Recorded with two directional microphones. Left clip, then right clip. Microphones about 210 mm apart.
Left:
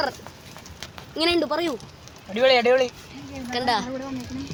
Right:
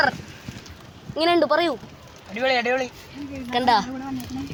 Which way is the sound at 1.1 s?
5° right (ahead or behind).